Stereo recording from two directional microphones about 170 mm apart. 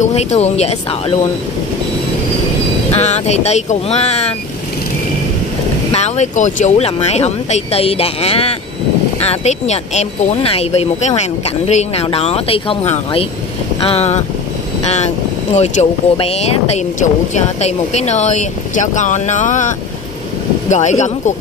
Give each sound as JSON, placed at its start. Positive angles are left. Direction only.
{"t": 0.0, "sound": "speech", "side_deg": 40}
{"t": 3.0, "sound": "speech", "side_deg": 40}
{"t": 5.9, "sound": "speech", "side_deg": 40}
{"t": 15.5, "sound": "speech", "side_deg": 40}
{"t": 20.7, "sound": "speech", "side_deg": 45}